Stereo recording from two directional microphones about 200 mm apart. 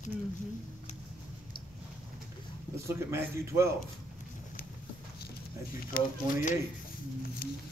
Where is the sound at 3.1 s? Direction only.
15° right (ahead or behind).